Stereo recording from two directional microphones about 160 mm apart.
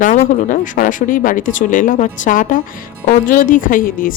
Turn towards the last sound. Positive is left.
turn(degrees=60)  # may be behind; listen again after turning